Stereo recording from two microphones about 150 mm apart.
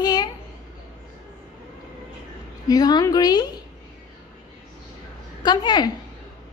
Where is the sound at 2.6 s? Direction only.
25° left (ahead or behind).